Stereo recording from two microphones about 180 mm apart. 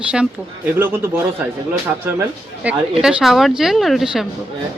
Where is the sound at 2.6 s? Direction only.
5° right (ahead or behind).